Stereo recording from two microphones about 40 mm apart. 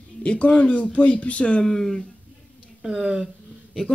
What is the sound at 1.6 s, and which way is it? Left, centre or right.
Speech, centre.